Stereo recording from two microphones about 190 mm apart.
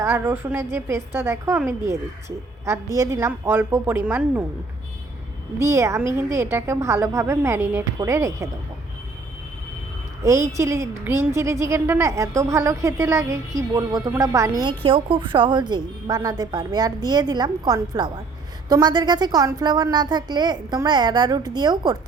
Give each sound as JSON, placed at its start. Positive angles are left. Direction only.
{"t": 0.0, "sound": "a woman's voice", "side_deg": -15}
{"t": 5.5, "sound": "a woman's voice", "side_deg": -15}
{"t": 10.2, "sound": "a woman's voice", "side_deg": -15}